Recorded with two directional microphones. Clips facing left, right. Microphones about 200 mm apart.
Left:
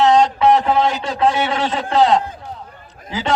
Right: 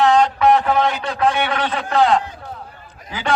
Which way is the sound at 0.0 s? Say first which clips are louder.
Left 1 dB; 25° left (ahead or behind).